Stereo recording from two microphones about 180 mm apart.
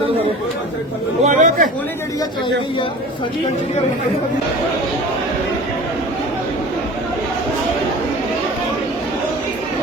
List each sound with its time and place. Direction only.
1.2 s chatter: 45° right (ahead or behind)